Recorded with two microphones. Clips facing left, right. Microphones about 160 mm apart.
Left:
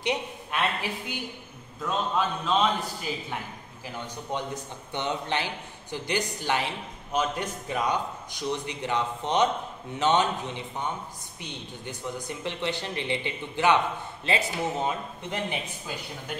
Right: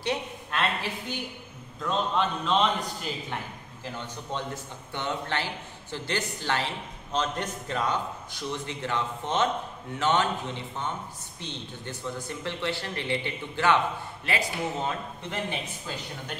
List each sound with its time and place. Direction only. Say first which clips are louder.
0.0 s a woman's voice: left 1 dB; 15° left (ahead or behind)